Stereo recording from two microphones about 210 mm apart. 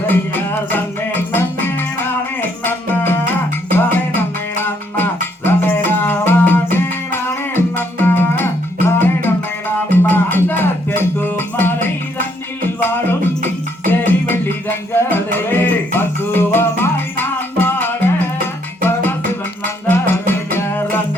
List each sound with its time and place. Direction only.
0.1 s music: 10° left (ahead or behind)
2.6 s music: 10° left (ahead or behind)
13.4 s music: 40° right (ahead or behind)
15.1 s music: 10° left (ahead or behind)
19.9 s music: 10° left (ahead or behind)